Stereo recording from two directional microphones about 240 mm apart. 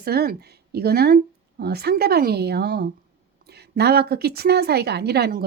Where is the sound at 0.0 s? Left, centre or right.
Right.